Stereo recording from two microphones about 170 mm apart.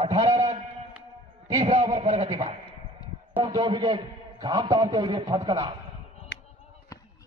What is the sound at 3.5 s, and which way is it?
A man's voice, 25° right (ahead or behind).